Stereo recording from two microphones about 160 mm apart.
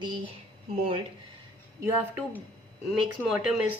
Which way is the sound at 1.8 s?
15° right (ahead or behind).